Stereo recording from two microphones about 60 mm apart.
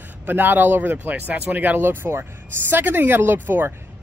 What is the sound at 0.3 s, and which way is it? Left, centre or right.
Speech, right.